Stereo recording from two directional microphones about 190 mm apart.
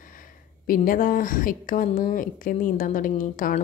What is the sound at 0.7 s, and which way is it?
A woman's voice, 45° left (ahead or behind).